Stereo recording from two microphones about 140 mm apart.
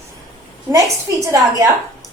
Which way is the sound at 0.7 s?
25° right (ahead or behind).